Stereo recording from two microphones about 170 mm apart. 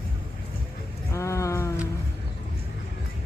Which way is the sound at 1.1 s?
15° left (ahead or behind).